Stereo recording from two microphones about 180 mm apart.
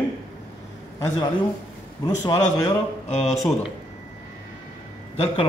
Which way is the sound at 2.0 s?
20° left (ahead or behind).